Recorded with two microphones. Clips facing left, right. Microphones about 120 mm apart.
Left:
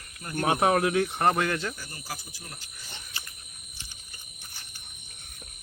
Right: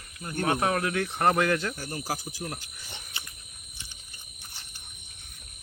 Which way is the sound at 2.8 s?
15° right (ahead or behind).